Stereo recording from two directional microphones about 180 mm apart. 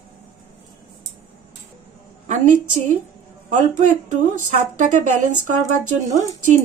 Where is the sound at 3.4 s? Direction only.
45° right (ahead or behind).